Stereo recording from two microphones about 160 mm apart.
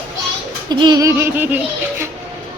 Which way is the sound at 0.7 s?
25° right (ahead or behind).